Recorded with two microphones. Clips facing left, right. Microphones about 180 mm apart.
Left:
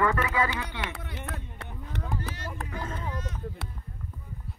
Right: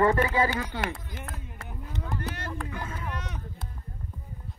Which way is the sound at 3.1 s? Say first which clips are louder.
Left 1 dB; 70° right (ahead or behind).